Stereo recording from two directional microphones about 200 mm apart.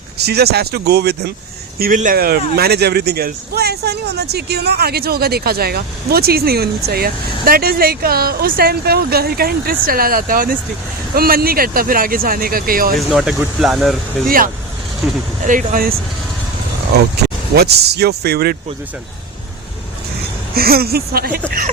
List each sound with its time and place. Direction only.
0.2 s speech: 55° right (ahead or behind)
1.8 s speech: 40° right (ahead or behind)
13.1 s speech: centre (ahead or behind)
14.3 s speech: 45° right (ahead or behind)
17.5 s speech: 50° right (ahead or behind)
20.6 s speech: 50° right (ahead or behind)